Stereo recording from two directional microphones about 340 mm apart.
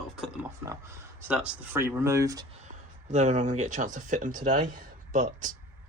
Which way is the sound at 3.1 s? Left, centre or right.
Right.